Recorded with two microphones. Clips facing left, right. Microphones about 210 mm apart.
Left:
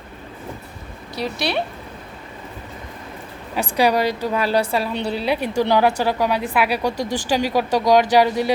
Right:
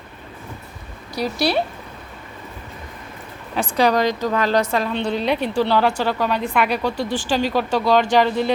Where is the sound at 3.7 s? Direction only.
10° left (ahead or behind).